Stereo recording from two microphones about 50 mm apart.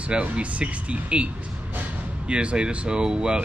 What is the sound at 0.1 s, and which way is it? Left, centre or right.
Speech, right.